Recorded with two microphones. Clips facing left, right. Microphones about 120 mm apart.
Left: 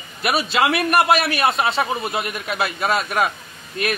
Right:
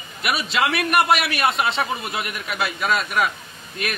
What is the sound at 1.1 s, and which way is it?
Speech, centre (ahead or behind).